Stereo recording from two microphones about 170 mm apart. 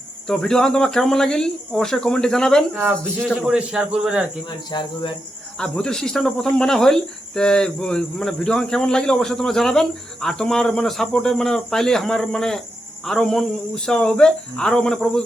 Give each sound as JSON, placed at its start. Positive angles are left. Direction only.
{"t": 0.3, "sound": "speech", "side_deg": 5}
{"t": 2.7, "sound": "speech", "side_deg": -10}
{"t": 4.4, "sound": "speech", "side_deg": 25}
{"t": 5.5, "sound": "speech", "side_deg": 5}